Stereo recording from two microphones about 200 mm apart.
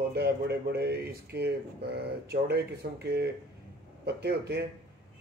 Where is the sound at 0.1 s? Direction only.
55° right (ahead or behind).